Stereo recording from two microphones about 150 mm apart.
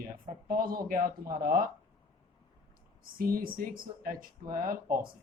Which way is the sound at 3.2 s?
75° right (ahead or behind).